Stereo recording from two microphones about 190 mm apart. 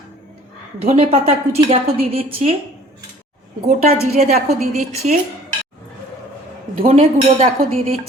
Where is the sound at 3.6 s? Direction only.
35° right (ahead or behind).